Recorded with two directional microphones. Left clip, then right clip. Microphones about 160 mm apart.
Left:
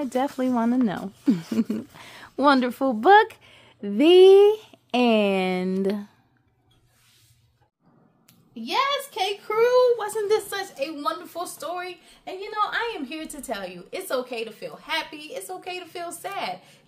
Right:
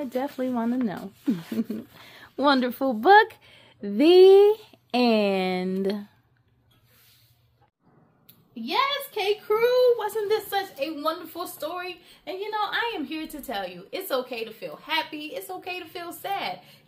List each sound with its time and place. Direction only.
0.0 s speech: 25° left (ahead or behind)
8.6 s a sound: 85° left
9.6 s a woman's voice: 30° left (ahead or behind); by 16.5 s 10° left (ahead or behind)